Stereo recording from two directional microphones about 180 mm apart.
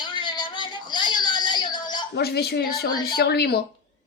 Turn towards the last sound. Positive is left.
turn(degrees=65)  # may be behind; listen again after turning